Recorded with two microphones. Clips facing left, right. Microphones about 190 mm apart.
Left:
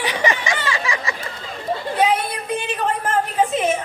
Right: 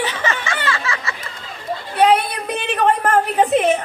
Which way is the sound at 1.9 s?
65° right (ahead or behind).